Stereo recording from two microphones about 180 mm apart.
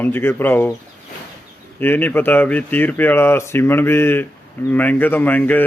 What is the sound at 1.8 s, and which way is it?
Speech, 10° left (ahead or behind).